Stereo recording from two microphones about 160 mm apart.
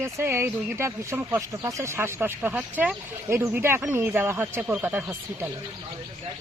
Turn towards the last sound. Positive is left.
turn(degrees=-15)  # may be behind; listen again after turning